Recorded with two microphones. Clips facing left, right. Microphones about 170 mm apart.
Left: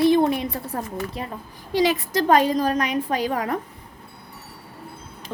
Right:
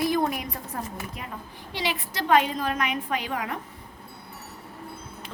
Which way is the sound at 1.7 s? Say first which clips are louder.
Left 10 dB; 45° left (ahead or behind).